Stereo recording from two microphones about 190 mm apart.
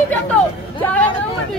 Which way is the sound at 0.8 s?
10° left (ahead or behind).